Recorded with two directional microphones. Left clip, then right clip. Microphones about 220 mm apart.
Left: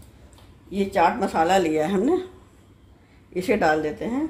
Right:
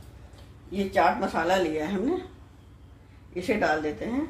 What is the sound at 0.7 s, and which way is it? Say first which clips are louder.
Speech: left 3 dB; 45° left (ahead or behind).